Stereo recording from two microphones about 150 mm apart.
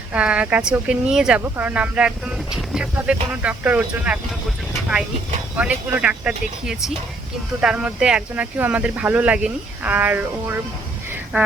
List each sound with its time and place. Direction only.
0.1 s speech: 10° right (ahead or behind)
5.5 s speech: 10° right (ahead or behind)